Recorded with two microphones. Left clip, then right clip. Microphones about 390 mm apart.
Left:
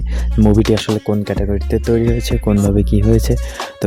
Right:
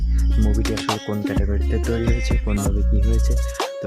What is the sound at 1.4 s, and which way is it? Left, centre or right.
Speech, right.